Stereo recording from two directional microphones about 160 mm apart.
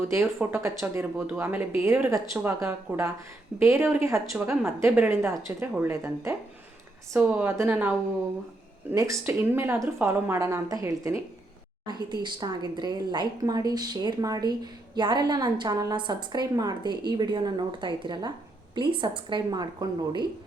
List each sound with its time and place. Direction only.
0.5 s a woman's voice: 15° right (ahead or behind)